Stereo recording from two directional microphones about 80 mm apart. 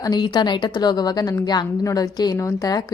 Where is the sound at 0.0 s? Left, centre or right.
Left.